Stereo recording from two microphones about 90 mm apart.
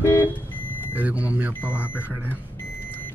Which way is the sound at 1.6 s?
20° left (ahead or behind).